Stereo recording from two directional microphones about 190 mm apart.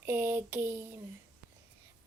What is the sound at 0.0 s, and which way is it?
Child singing, 10° right (ahead or behind).